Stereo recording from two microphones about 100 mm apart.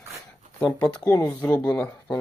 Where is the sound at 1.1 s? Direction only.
25° left (ahead or behind).